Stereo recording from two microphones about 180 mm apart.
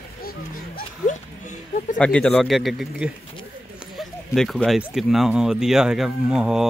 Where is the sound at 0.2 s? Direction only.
55° left (ahead or behind).